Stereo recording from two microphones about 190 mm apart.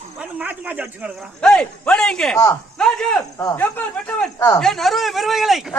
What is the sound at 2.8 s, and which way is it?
Speech, 5° left (ahead or behind).